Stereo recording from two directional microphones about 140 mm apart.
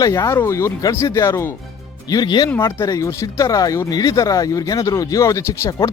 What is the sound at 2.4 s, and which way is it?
Speech, 15° left (ahead or behind).